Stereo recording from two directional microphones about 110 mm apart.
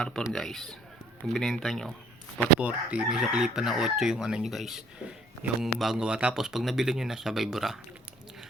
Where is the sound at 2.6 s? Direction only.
10° right (ahead or behind).